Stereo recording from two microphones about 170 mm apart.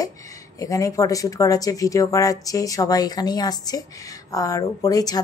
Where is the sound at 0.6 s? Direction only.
20° left (ahead or behind).